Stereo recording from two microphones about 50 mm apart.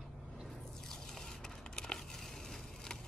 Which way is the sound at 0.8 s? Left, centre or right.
Centre.